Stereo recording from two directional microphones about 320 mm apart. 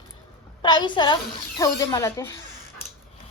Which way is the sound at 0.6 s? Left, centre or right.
Centre.